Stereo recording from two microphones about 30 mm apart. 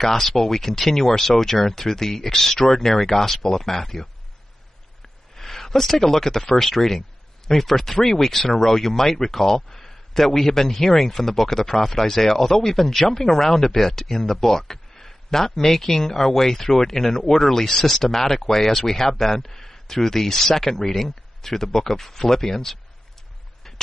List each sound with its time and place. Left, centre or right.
0.0 s speech: centre
5.3 s speech: centre